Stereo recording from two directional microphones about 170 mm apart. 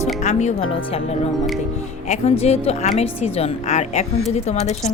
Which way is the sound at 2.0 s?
35° left (ahead or behind).